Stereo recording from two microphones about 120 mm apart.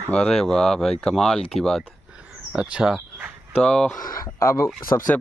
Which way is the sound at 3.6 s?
10° left (ahead or behind).